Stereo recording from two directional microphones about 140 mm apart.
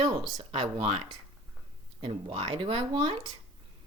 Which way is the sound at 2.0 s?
50° right (ahead or behind).